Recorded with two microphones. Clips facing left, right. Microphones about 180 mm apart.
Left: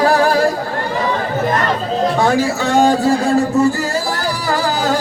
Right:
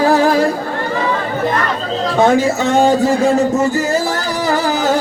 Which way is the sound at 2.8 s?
20° right (ahead or behind).